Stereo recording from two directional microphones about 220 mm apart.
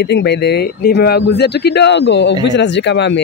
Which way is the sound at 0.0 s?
50° left (ahead or behind).